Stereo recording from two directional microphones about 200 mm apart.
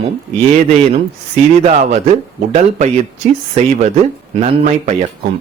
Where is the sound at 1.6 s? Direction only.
35° right (ahead or behind).